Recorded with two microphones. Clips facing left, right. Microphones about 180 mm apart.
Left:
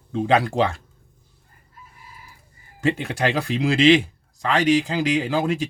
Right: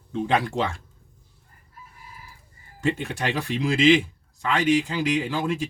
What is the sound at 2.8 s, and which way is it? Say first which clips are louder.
Speech: left 4 dB; 70° left (ahead or behind).